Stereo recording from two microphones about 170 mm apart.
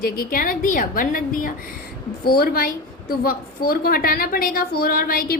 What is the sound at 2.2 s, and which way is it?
A woman's voice, 65° left (ahead or behind).